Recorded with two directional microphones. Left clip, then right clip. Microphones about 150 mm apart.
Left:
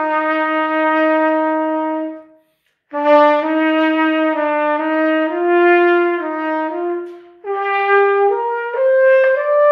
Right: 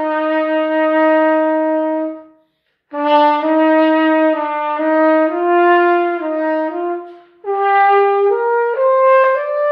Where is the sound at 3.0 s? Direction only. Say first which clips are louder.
Left 1 dB; 25° left (ahead or behind).